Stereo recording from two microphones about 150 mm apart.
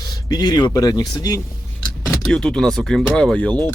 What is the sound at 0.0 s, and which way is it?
Speech, 25° left (ahead or behind).